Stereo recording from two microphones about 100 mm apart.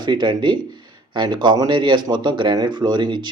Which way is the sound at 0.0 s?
50° right (ahead or behind).